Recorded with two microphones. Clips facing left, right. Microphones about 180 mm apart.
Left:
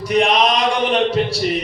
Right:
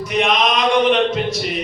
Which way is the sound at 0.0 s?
35° left (ahead or behind).